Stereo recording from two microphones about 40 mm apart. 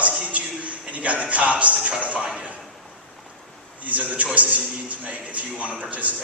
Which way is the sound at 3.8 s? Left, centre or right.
Right.